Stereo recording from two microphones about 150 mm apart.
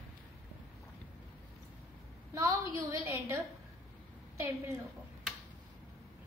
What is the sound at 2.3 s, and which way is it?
A woman's voice, 20° right (ahead or behind).